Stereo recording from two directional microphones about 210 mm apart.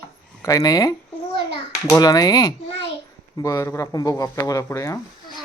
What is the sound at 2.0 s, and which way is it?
Speech, 20° left (ahead or behind).